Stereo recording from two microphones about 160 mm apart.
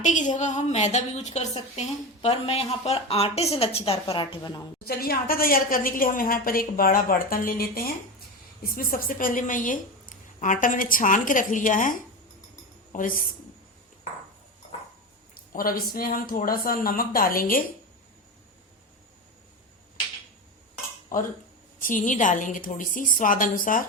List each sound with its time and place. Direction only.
0.0 s a woman's voice: 50° left (ahead or behind); by 4.6 s 30° left (ahead or behind)
4.8 s a woman's voice: 75° left (ahead or behind); by 13.2 s 60° left (ahead or behind)
15.4 s a woman's voice: 65° left (ahead or behind)
21.8 s a woman's voice: 55° left (ahead or behind)